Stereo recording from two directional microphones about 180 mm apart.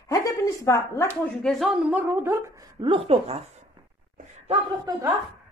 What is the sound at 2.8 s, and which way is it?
Speech, 30° right (ahead or behind).